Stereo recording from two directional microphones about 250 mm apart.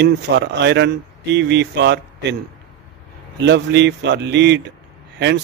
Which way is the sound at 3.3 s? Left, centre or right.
Right.